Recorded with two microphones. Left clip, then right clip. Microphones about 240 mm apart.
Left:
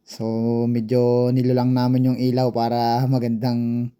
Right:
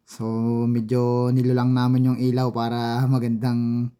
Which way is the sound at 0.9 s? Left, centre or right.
Right.